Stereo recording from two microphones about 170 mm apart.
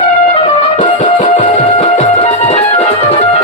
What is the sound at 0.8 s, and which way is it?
Music, 50° left (ahead or behind).